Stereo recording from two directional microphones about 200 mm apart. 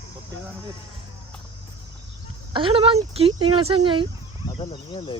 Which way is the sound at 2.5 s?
25° right (ahead or behind).